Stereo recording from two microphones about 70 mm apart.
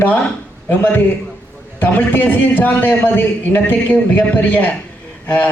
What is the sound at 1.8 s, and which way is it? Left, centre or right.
A man's voice, left.